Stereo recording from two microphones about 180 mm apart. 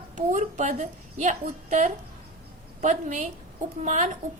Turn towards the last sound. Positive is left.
turn(degrees=-40)  # may be behind; listen again after turning